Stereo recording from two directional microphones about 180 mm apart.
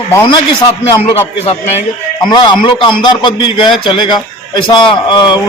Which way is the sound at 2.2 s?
25° left (ahead or behind).